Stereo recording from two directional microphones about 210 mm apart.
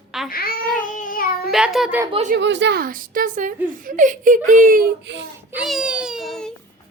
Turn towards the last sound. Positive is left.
turn(degrees=0)  # may be behind; listen again after turning